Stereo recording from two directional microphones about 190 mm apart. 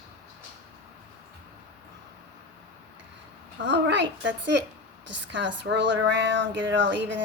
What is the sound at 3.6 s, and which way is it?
Speech, 70° right (ahead or behind).